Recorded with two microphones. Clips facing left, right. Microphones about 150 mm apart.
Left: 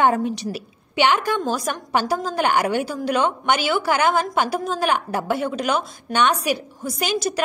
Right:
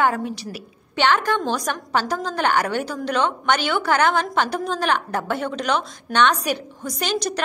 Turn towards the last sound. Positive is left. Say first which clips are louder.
# left 2 dB
turn(degrees=10)  # may be behind; listen again after turning